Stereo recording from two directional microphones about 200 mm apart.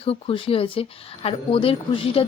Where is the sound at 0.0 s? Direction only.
30° left (ahead or behind).